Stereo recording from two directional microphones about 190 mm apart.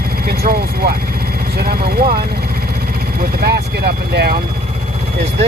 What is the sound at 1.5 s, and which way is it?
Speech, 55° right (ahead or behind).